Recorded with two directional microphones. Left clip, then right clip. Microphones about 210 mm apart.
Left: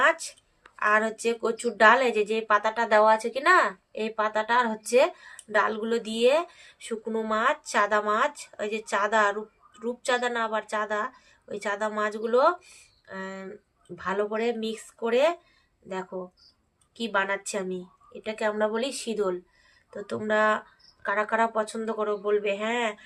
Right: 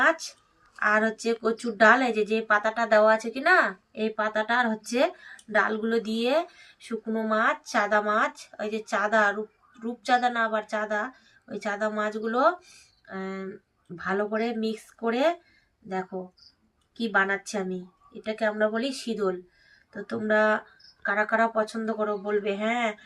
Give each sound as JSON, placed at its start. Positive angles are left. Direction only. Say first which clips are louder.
{"t": 0.8, "sound": "speech", "louder": "even", "side_deg": 50}
{"t": 17.0, "sound": "speech", "louder": "right 2 dB", "side_deg": 45}